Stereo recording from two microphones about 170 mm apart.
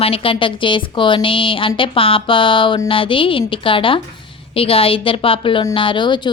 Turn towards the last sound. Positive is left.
turn(degrees=25)  # may be behind; listen again after turning